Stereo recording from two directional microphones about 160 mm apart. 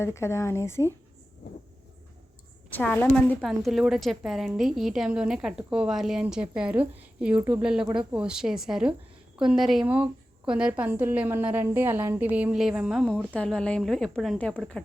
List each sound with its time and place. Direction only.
0.0 s speech: 15° left (ahead or behind)
2.6 s speech: 10° left (ahead or behind)
3.4 s a woman's voice: centre (ahead or behind)